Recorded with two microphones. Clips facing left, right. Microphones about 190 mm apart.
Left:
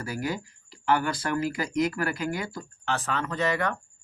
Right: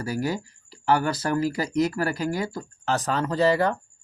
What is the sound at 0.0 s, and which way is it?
Speech, 35° right (ahead or behind).